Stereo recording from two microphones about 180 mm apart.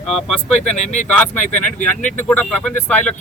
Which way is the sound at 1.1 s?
10° left (ahead or behind).